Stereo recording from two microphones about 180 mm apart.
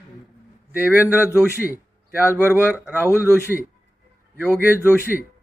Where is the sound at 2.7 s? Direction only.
10° right (ahead or behind).